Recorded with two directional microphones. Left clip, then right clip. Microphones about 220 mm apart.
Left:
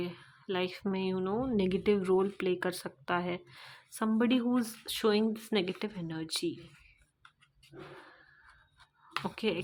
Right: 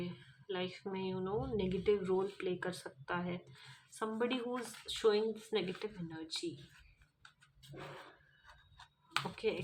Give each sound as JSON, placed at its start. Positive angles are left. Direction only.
{"t": 0.0, "sound": "a woman's voice", "side_deg": 40}
{"t": 9.3, "sound": "speech", "side_deg": 40}